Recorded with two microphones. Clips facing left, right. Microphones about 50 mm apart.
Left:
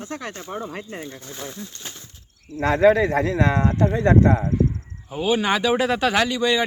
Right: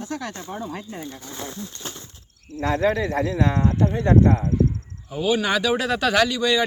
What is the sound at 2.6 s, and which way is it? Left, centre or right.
Speech, left.